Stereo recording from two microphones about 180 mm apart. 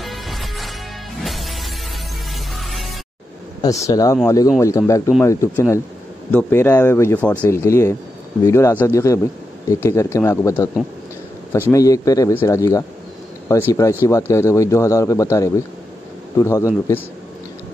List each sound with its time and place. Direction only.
0.0 s music: centre (ahead or behind)
3.6 s a man's voice: 20° left (ahead or behind)
11.7 s a man's voice: 20° left (ahead or behind)